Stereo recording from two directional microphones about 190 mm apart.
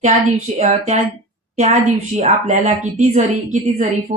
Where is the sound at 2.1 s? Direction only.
35° right (ahead or behind).